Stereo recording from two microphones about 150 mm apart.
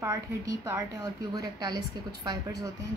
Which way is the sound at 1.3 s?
25° right (ahead or behind).